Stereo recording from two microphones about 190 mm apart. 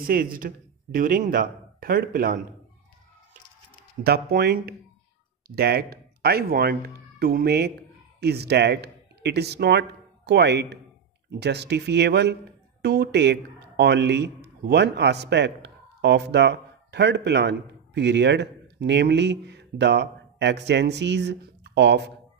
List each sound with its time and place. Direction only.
0.0 s speech: 50° right (ahead or behind)
4.0 s a man's voice: 55° right (ahead or behind)